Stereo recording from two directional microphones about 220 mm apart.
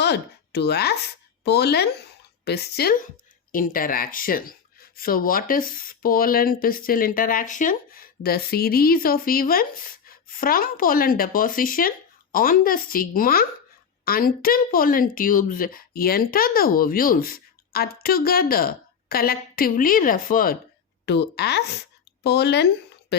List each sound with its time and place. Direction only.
0.0 s speech: 50° left (ahead or behind)